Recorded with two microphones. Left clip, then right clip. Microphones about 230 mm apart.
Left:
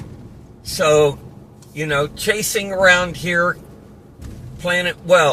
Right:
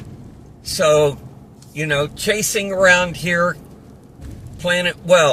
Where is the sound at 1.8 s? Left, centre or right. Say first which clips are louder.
Even; right.